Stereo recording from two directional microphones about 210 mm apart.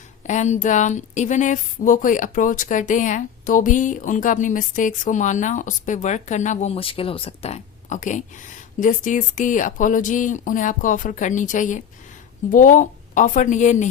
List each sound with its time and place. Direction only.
0.3 s a woman's voice: 35° left (ahead or behind)